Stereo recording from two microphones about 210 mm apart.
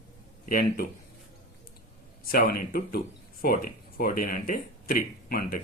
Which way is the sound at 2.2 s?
45° left (ahead or behind).